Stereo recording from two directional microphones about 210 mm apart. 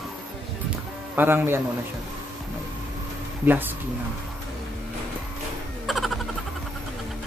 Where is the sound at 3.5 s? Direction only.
10° right (ahead or behind).